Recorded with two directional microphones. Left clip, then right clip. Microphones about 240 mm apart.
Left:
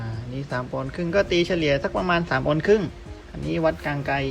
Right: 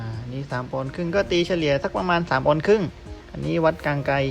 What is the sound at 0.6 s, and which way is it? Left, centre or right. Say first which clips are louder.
Speech: right 1 dB; centre.